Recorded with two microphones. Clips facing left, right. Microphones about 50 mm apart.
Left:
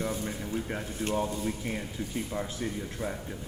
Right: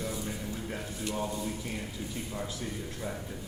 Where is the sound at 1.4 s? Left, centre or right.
Left.